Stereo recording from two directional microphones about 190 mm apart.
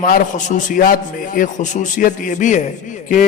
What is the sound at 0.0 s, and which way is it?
A man's voice, 45° left (ahead or behind).